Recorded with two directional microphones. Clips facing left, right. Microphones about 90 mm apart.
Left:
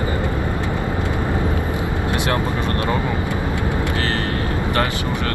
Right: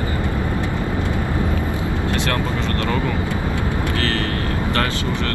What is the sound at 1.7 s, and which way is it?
Vehicle, 20° left (ahead or behind).